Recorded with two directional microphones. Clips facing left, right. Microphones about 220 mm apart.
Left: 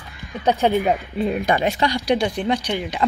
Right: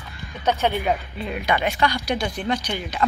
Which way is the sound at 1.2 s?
45° left (ahead or behind).